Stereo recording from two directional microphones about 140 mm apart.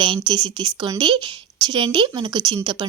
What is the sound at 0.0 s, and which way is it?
Speech, 35° right (ahead or behind).